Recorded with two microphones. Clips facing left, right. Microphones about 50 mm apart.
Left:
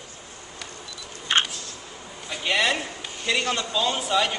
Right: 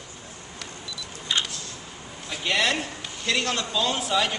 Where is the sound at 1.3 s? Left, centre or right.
Left.